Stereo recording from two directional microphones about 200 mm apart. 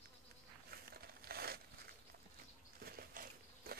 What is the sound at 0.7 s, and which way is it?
Crumpling, 50° right (ahead or behind).